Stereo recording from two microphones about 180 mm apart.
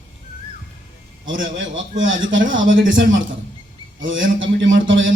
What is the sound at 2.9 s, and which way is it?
A man's voice, 90° right.